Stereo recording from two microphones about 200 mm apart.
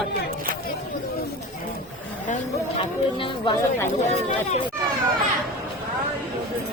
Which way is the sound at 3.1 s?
25° left (ahead or behind).